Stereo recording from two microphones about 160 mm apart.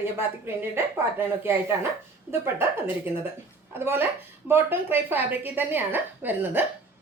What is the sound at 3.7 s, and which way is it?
Speech, 15° right (ahead or behind).